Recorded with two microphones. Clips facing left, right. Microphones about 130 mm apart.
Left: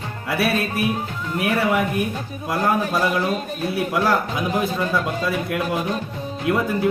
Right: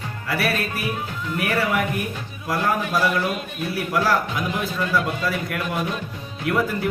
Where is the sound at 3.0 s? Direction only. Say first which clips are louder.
Left 1 dB; 30° left (ahead or behind).